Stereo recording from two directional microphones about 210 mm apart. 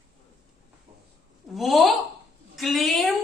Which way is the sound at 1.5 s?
Centre (ahead or behind).